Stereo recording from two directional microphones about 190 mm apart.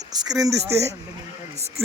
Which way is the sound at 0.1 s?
20° right (ahead or behind).